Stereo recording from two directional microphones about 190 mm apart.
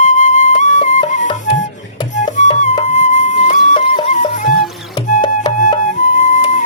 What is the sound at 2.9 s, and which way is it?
Flute, 40° left (ahead or behind).